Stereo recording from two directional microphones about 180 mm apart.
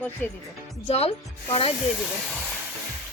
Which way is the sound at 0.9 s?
35° left (ahead or behind).